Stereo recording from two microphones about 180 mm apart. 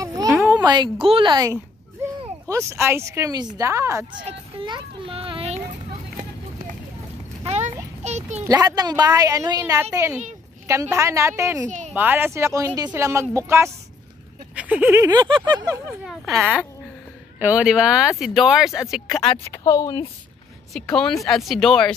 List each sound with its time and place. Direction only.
0.0 s a sound: 20° right (ahead or behind)
0.5 s a woman's voice: 25° right (ahead or behind)
4.2 s children playing: 30° right (ahead or behind)
7.4 s a sound: 40° right (ahead or behind)
8.5 s a woman's voice: 20° right (ahead or behind)
11.6 s a woman's voice: 40° right (ahead or behind)
11.9 s speech: 10° right (ahead or behind)
14.5 s a sound: 5° right (ahead or behind)
15.0 s a woman's voice: 25° right (ahead or behind)
16.0 s speech: centre (ahead or behind)
19.2 s speech: 30° left (ahead or behind)
19.6 s a woman's voice: 20° left (ahead or behind)
20.7 s speech: 5° left (ahead or behind)